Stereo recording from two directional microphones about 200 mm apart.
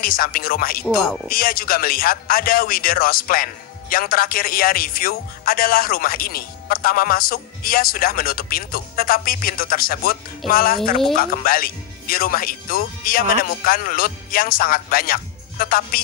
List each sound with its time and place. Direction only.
0.0 s speech: 45° left (ahead or behind)